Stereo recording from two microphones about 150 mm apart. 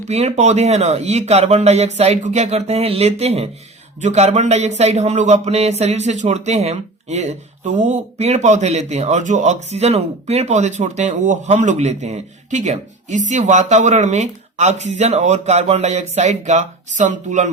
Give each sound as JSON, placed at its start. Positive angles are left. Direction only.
{"t": 0.1, "sound": "speech", "side_deg": -45}